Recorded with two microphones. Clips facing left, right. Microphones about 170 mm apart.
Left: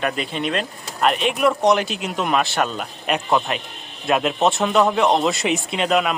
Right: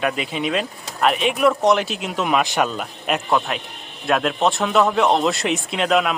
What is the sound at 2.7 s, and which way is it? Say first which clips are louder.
A man's voice: even; centre (ahead or behind).